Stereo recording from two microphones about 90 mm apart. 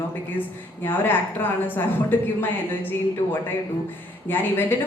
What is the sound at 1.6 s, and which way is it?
Speech, 20° left (ahead or behind).